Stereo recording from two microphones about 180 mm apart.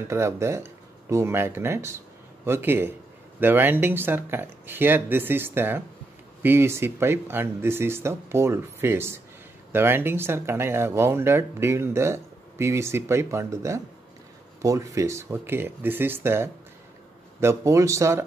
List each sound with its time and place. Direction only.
0.1 s speech: 15° right (ahead or behind)